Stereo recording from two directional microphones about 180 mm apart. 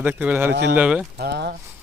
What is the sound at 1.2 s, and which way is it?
Speech, 65° right (ahead or behind).